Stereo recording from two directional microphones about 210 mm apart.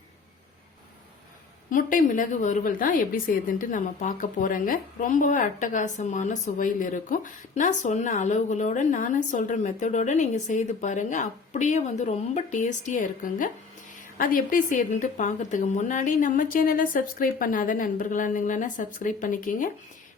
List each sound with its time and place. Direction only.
1.7 s a woman's voice: 40° left (ahead or behind)